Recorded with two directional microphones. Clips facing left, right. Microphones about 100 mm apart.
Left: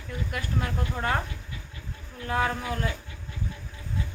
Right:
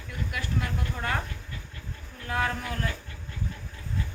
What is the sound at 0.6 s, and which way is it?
Speech, 25° left (ahead or behind).